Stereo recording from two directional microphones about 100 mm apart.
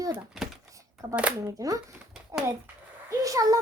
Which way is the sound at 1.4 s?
35° right (ahead or behind).